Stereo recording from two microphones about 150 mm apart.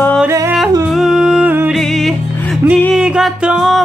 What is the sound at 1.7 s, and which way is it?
Music, centre (ahead or behind).